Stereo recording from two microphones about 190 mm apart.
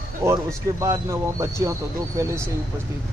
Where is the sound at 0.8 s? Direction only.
15° right (ahead or behind).